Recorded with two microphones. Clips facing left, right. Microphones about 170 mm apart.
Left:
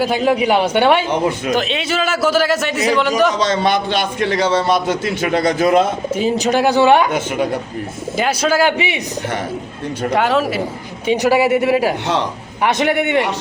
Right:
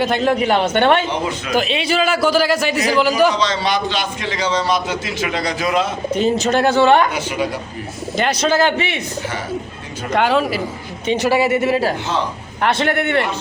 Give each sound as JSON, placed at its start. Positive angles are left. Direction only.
{"t": 0.0, "sound": "a man's voice", "side_deg": 10}
{"t": 3.3, "sound": "a man's voice", "side_deg": 50}
{"t": 6.1, "sound": "a man's voice", "side_deg": 10}
{"t": 8.1, "sound": "a man's voice", "side_deg": 10}
{"t": 10.1, "sound": "a man's voice", "side_deg": 0}
{"t": 11.0, "sound": "a man's voice", "side_deg": 15}